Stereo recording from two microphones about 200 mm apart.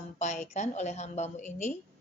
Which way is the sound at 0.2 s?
35° left (ahead or behind).